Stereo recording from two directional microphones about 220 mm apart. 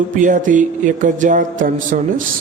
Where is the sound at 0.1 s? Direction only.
35° right (ahead or behind).